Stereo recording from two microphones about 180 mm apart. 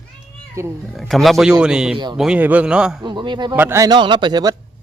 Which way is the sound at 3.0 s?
25° right (ahead or behind).